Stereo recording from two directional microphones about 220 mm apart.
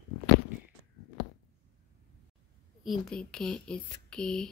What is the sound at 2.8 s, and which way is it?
Speech, centre (ahead or behind).